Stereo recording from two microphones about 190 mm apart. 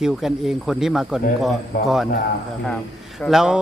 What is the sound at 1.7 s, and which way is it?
Speech, 55° left (ahead or behind).